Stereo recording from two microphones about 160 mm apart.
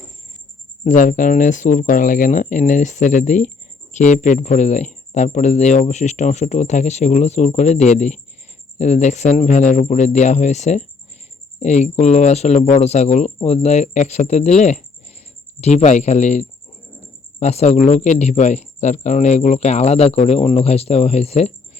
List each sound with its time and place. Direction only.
0.9 s speech: 55° left (ahead or behind)